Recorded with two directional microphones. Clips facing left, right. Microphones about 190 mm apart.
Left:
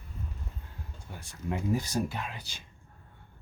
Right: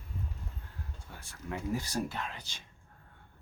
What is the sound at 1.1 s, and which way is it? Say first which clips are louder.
Speech: left 6 dB; 15° left (ahead or behind).